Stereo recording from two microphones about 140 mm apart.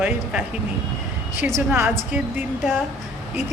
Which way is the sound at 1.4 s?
20° right (ahead or behind).